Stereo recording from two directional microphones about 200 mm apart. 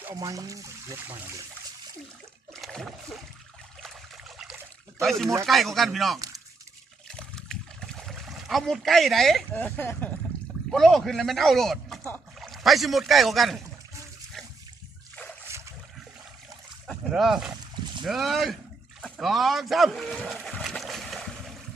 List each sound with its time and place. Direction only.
0.0 s speech: 15° right (ahead or behind)
2.5 s water: centre (ahead or behind)
3.8 s trickle: centre (ahead or behind)
5.0 s speech: centre (ahead or behind)
6.1 s speech: 15° right (ahead or behind)
7.1 s trickle: 5° left (ahead or behind)
10.7 s speech: centre (ahead or behind)
16.8 s a sound: centre (ahead or behind)
18.0 s speech: centre (ahead or behind)
19.0 s boat: centre (ahead or behind)